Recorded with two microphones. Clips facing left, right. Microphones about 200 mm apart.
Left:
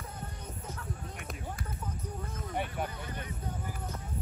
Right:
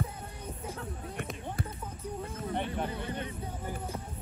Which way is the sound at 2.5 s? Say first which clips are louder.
Right 1 dB; 10° left (ahead or behind).